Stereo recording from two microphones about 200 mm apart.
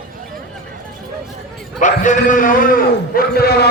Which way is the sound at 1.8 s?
40° left (ahead or behind).